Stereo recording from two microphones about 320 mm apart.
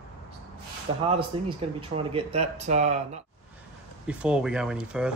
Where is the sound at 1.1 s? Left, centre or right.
Centre.